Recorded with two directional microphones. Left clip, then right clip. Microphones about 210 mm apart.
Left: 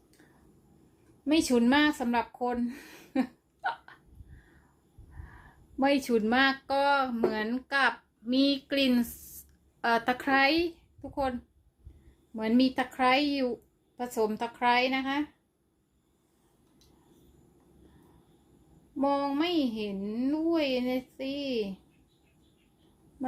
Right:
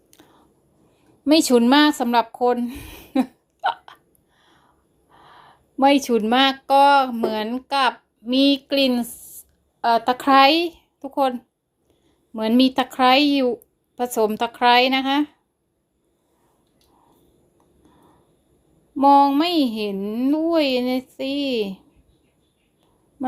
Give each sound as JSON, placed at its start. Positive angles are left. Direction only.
{"t": 1.2, "sound": "speech", "side_deg": -35}
{"t": 5.8, "sound": "a woman's voice", "side_deg": -30}
{"t": 12.4, "sound": "a woman's voice", "side_deg": -30}
{"t": 18.9, "sound": "a woman's voice", "side_deg": -40}